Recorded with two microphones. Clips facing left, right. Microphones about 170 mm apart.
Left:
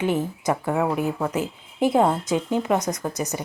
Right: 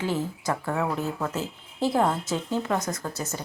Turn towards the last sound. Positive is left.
turn(degrees=15)  # may be behind; listen again after turning